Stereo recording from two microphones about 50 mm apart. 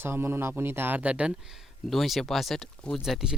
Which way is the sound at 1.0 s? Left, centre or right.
Right.